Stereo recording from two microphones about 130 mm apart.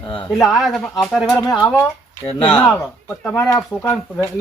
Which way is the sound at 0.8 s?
15° left (ahead or behind).